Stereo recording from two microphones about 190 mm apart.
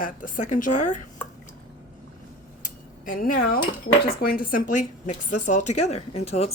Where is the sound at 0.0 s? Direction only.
45° left (ahead or behind).